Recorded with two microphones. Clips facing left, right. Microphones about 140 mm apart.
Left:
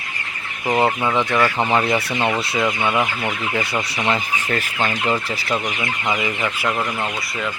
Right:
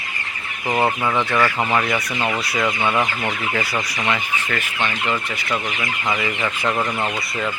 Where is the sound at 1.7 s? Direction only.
25° left (ahead or behind).